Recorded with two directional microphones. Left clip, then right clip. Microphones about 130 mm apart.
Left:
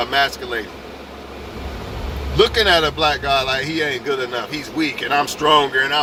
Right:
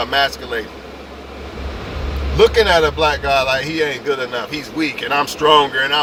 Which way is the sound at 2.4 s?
20° right (ahead or behind).